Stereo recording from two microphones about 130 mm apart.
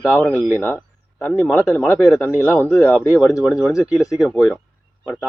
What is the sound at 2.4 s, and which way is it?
Speech, 10° left (ahead or behind).